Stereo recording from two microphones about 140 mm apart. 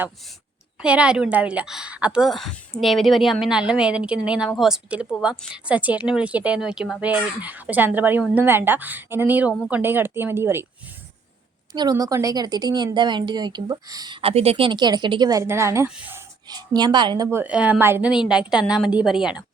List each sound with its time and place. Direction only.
0.8 s speech: 5° right (ahead or behind)
11.7 s a woman's voice: 30° right (ahead or behind)
14.2 s speech: 45° right (ahead or behind); by 16.2 s 20° right (ahead or behind)
16.5 s speech: 30° right (ahead or behind)
17.3 s speech: 10° right (ahead or behind)
18.1 s a woman's voice: 5° right (ahead or behind)